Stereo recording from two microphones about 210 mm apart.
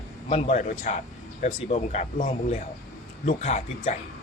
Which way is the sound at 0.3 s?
30° left (ahead or behind).